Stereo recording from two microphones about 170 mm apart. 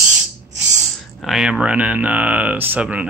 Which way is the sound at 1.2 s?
5° right (ahead or behind).